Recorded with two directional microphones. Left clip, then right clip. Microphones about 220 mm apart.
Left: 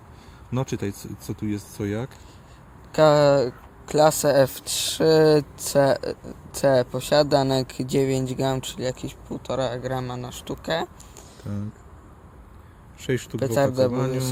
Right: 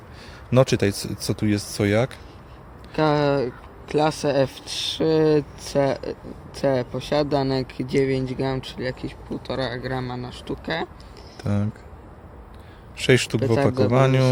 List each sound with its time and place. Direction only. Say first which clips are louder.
0.5 s speech: right 10 dB; 25° right (ahead or behind)
2.9 s speech: left 4 dB; 35° left (ahead or behind)
11.4 s a sound: right 9 dB; 30° right (ahead or behind)
13.0 s speech: right 7 dB; 30° right (ahead or behind)